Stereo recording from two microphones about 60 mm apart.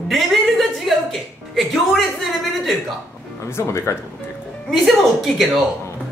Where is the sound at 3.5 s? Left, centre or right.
Left.